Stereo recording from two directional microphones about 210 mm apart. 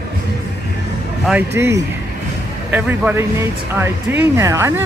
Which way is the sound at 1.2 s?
10° right (ahead or behind).